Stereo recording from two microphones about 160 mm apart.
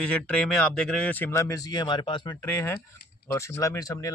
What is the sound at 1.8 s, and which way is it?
Speech, 30° left (ahead or behind).